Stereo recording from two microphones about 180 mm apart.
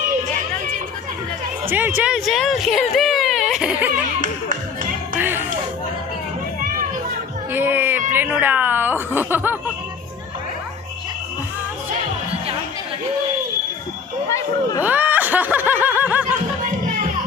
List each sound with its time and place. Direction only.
1.7 s speech: 10° right (ahead or behind)
4.2 s music: 50° right (ahead or behind)
5.1 s music: 10° right (ahead or behind)
7.5 s speech: 10° right (ahead or behind)
14.3 s speech: 20° left (ahead or behind)
14.8 s snicker: 10° right (ahead or behind)
16.6 s music: 50° right (ahead or behind)